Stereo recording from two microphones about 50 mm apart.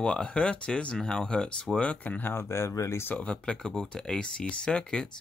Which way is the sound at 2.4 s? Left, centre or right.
Left.